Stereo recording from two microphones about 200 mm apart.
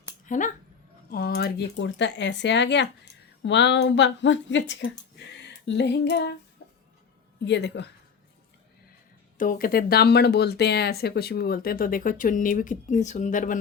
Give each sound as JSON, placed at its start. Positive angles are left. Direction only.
{"t": 0.3, "sound": "speech", "side_deg": 40}
{"t": 1.1, "sound": "speech", "side_deg": 55}
{"t": 6.6, "sound": "a sound", "side_deg": 50}
{"t": 7.4, "sound": "speech", "side_deg": 60}
{"t": 9.4, "sound": "speech", "side_deg": 45}